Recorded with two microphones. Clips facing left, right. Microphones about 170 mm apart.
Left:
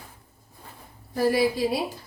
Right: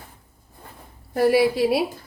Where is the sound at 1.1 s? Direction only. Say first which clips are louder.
Right 4 dB; 70° right (ahead or behind).